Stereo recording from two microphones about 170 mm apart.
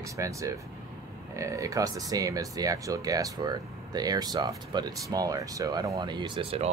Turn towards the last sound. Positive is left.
turn(degrees=-35)  # may be behind; listen again after turning